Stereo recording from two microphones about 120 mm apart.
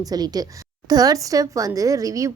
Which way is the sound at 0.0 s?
30° right (ahead or behind).